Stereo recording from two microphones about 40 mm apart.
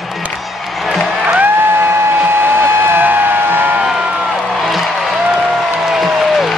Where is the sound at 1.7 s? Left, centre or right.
Right.